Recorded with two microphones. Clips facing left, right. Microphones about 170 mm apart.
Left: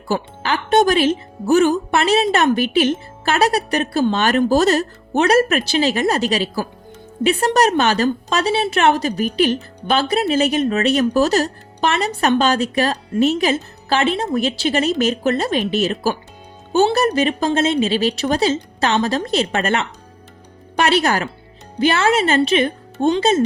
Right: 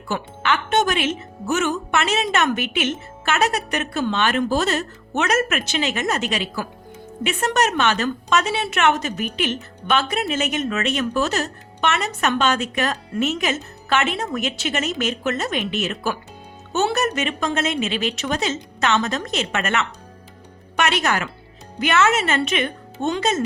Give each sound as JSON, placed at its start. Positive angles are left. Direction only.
{"t": 0.1, "sound": "a woman's voice", "side_deg": 35}